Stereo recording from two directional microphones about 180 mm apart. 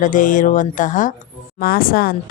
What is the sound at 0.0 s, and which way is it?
A woman's voice, 45° left (ahead or behind).